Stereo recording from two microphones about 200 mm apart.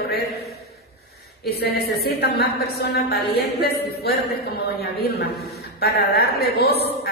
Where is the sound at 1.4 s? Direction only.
55° left (ahead or behind).